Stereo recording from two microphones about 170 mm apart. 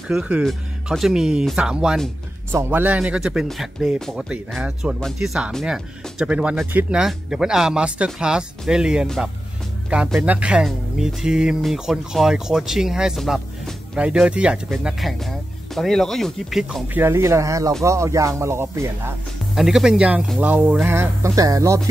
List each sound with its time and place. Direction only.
0.1 s speech: 5° right (ahead or behind)
16.9 s speech: 15° right (ahead or behind)
19.5 s speech: 5° right (ahead or behind); by 21.8 s 20° right (ahead or behind)